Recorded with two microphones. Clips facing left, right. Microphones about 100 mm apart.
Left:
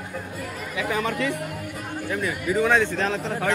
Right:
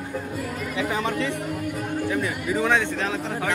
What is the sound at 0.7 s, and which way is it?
Speech, 25° right (ahead or behind).